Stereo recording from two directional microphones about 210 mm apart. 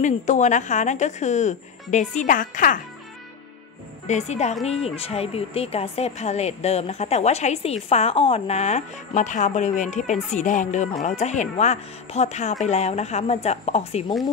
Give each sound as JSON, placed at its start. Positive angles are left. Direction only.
{"t": 0.0, "sound": "speech", "side_deg": 35}
{"t": 4.1, "sound": "speech", "side_deg": 35}